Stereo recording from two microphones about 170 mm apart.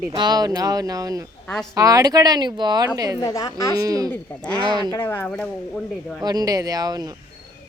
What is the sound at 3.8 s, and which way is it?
Speech, 20° right (ahead or behind).